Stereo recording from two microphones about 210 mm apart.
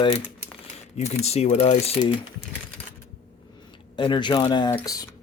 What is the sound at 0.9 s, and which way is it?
Speech, 30° left (ahead or behind).